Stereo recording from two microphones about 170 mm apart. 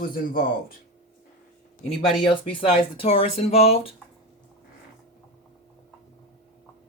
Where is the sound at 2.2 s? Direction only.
30° left (ahead or behind).